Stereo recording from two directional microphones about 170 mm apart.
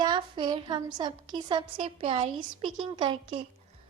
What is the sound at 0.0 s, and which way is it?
A woman's voice, 25° right (ahead or behind).